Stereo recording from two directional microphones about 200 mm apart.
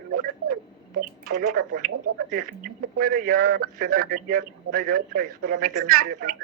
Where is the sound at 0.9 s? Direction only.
45° right (ahead or behind).